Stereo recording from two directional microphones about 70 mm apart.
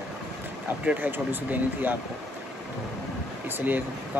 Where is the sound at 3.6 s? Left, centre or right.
Right.